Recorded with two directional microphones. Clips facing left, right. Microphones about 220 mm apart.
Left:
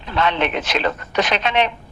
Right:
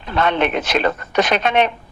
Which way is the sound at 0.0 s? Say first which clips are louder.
Right 2 dB; 50° right (ahead or behind).